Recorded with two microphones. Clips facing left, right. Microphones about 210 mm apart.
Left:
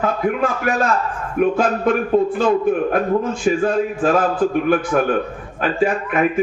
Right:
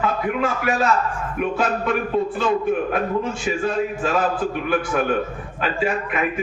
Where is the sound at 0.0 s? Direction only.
45° left (ahead or behind).